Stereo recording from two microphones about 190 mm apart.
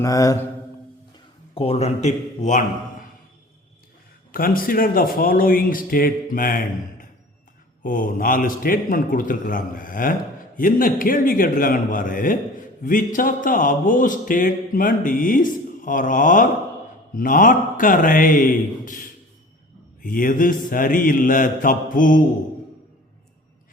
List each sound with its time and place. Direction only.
0.0 s mantra: 15° left (ahead or behind)
1.5 s a man's voice: 30° left (ahead or behind)
4.4 s speech: 50° left (ahead or behind)